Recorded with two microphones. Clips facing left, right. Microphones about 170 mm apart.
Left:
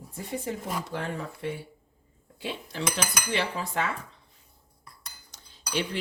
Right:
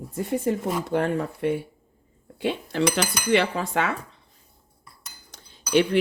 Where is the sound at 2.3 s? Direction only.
65° right (ahead or behind).